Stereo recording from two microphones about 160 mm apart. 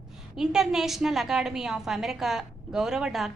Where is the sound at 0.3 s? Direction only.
5° right (ahead or behind).